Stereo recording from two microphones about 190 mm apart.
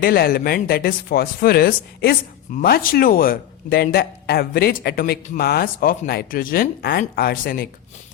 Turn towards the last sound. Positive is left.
turn(degrees=50)  # may be behind; listen again after turning